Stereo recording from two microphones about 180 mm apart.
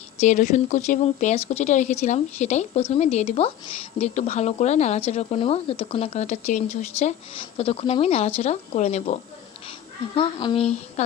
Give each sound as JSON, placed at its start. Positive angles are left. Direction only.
{"t": 0.2, "sound": "speech", "side_deg": 45}
{"t": 10.3, "sound": "speech", "side_deg": 30}